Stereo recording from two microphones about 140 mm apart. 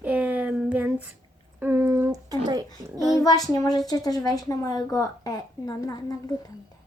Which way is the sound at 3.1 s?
25° left (ahead or behind).